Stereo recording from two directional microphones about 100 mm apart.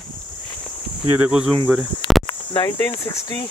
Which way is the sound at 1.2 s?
5° right (ahead or behind).